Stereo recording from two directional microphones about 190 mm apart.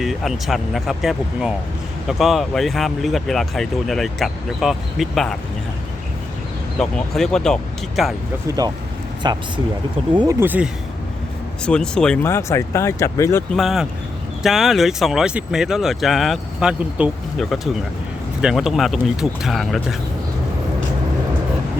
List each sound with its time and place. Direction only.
0.0 s speech: centre (ahead or behind)
6.7 s speech: 5° left (ahead or behind)
8.4 s speech: 20° right (ahead or behind)
11.6 s speech: 5° left (ahead or behind)
13.6 s speech: centre (ahead or behind)